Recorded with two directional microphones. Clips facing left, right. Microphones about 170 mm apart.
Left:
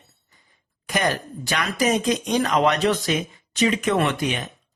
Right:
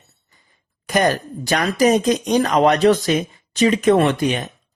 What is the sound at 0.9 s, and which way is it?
Speech, 40° right (ahead or behind).